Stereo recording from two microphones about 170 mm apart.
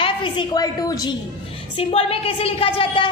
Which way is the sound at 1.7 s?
35° left (ahead or behind).